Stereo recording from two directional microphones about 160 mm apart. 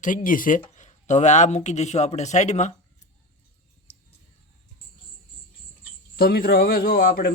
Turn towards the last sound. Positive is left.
turn(degrees=70)  # may be behind; listen again after turning